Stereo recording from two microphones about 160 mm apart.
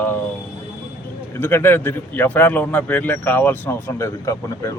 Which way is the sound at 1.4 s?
15° left (ahead or behind).